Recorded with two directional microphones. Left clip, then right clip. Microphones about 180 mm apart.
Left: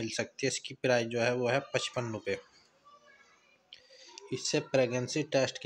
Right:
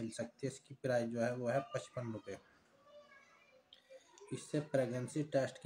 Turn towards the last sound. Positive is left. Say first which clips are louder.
# left 7 dB
turn(degrees=20)  # may be behind; listen again after turning